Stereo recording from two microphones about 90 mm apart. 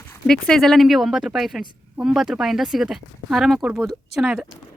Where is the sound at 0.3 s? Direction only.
5° left (ahead or behind); by 4.4 s 10° right (ahead or behind).